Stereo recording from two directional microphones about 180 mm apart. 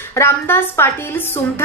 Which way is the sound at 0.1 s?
15° left (ahead or behind).